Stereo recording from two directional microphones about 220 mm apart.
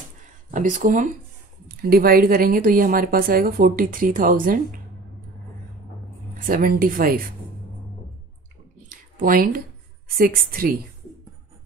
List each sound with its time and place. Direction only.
0.5 s a woman's voice: 35° right (ahead or behind)
6.3 s a woman's voice: 40° right (ahead or behind)
8.8 s a sound: 40° right (ahead or behind)
10.1 s a woman's voice: 40° right (ahead or behind)